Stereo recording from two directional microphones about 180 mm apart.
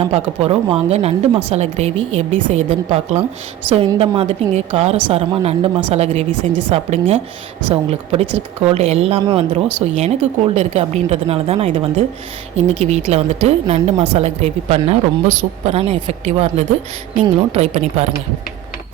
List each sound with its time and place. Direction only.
0.0 s a woman's voice: 35° right (ahead or behind)